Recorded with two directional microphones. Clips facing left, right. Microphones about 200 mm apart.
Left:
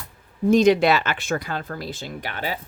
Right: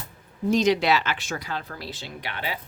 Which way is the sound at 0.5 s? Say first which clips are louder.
Left 5 dB; 50° left (ahead or behind).